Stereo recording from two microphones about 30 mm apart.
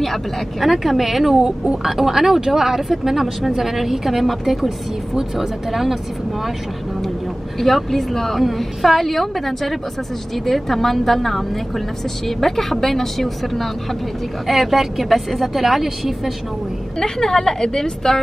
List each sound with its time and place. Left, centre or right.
0.0 s speech: centre
0.7 s speech: centre
7.5 s a woman's voice: centre
17.0 s a woman's voice: centre